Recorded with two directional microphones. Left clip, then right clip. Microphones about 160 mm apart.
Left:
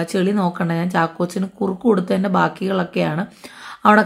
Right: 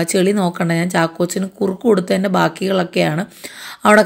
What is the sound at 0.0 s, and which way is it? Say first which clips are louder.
A woman's voice: right 4 dB; 20° right (ahead or behind).